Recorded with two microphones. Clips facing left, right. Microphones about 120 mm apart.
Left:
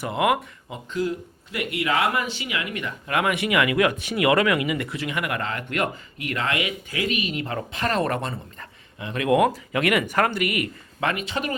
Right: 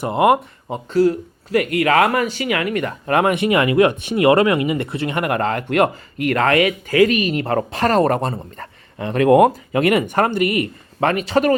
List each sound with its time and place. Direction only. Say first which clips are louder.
0.0 s speech: right 7 dB; 35° right (ahead or behind)
11.1 s speech: right 11 dB; 45° right (ahead or behind)